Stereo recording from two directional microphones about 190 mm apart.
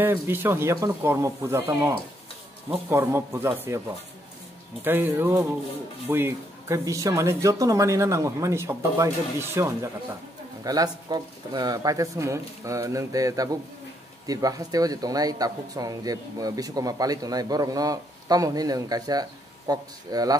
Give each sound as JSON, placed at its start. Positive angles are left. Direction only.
{"t": 0.0, "sound": "speech", "side_deg": -10}
{"t": 4.8, "sound": "speech", "side_deg": -10}